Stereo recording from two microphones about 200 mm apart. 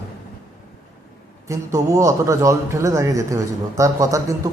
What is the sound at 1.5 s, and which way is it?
A man's voice, 15° right (ahead or behind).